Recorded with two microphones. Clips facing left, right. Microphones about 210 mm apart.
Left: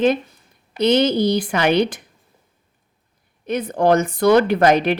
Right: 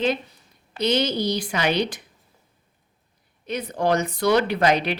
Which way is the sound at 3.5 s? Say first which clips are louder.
Left 6 dB; 55° left (ahead or behind).